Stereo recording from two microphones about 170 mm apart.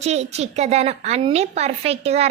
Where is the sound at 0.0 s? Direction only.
40° right (ahead or behind).